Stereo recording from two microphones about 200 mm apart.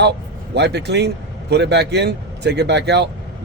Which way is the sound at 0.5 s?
55° right (ahead or behind).